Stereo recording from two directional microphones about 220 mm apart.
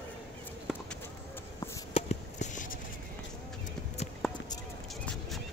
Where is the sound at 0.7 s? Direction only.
Centre (ahead or behind).